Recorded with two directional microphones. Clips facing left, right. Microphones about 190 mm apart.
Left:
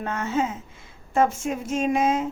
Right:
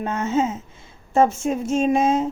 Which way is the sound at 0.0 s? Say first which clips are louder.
Right 4 dB; 20° right (ahead or behind).